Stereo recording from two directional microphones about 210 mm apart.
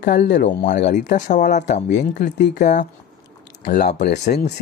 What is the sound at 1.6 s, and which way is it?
Speech, 35° left (ahead or behind).